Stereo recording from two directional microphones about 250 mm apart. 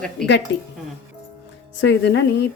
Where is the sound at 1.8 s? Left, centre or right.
Left.